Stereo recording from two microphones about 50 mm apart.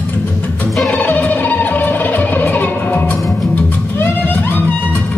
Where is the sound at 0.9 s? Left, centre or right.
Left.